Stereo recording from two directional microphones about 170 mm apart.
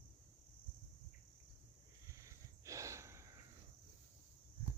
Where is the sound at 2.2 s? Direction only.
20° right (ahead or behind).